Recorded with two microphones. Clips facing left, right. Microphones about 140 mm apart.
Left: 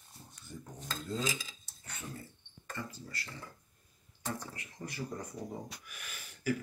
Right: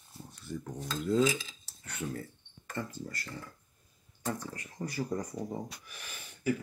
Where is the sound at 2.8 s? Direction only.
50° right (ahead or behind).